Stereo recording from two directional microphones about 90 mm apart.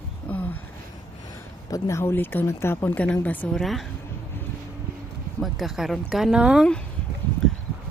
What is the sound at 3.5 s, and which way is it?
Speech, centre (ahead or behind).